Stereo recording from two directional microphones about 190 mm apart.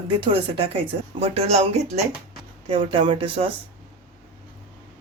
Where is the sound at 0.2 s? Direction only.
30° right (ahead or behind).